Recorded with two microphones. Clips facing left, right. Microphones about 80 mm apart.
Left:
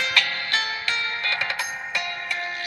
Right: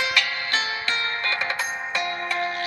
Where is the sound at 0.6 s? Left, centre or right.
Right.